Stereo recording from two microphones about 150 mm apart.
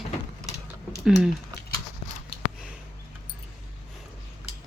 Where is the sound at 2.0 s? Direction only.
40° left (ahead or behind).